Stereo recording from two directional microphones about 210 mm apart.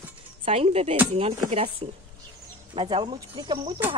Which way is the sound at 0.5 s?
30° right (ahead or behind).